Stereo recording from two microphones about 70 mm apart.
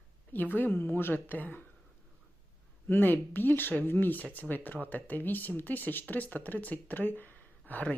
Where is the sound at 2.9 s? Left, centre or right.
Left.